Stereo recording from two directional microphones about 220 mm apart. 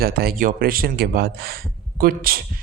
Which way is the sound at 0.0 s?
45° right (ahead or behind).